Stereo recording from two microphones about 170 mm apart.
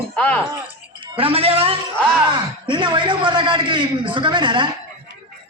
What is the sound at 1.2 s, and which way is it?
A woman's voice, 35° right (ahead or behind).